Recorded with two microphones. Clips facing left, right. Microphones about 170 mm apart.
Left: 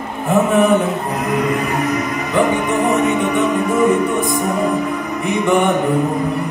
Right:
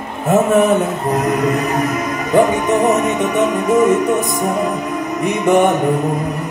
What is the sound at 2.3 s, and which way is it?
Music, 45° right (ahead or behind).